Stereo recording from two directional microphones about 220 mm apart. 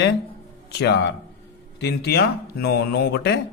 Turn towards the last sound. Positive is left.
turn(degrees=50)  # may be behind; listen again after turning